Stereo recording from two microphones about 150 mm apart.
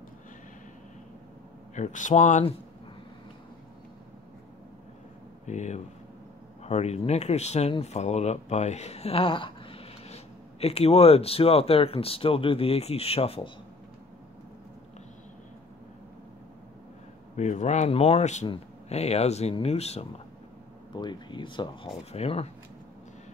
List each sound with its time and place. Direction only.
1.8 s speech: 55° left (ahead or behind)
5.5 s speech: 50° left (ahead or behind)
17.4 s speech: 50° left (ahead or behind)
20.9 s speech: 30° left (ahead or behind)